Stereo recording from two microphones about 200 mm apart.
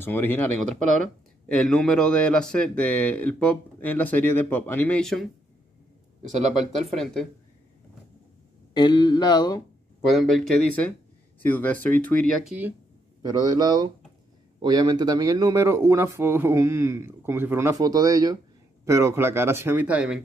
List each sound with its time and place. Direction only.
0.0 s speech: 10° left (ahead or behind)
0.7 s speech: 40° right (ahead or behind)
1.5 s speech: 5° left (ahead or behind)
6.8 s speech: centre (ahead or behind)
8.7 s a sound: 20° left (ahead or behind)
10.1 s speech: centre (ahead or behind)
12.4 s a man's voice: 10° right (ahead or behind)